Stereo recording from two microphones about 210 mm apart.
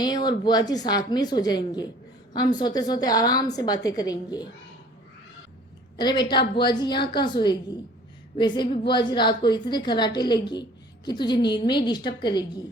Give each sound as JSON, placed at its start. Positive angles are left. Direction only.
{"t": 0.0, "sound": "a woman's voice", "side_deg": 20}
{"t": 6.0, "sound": "a woman's voice", "side_deg": 20}